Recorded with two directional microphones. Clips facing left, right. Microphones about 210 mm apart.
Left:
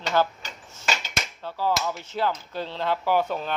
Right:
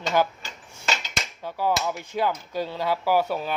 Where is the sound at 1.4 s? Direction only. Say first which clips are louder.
Right 1 dB; 15° right (ahead or behind).